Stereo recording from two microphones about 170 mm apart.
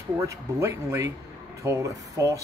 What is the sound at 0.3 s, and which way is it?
Speech, 15° right (ahead or behind).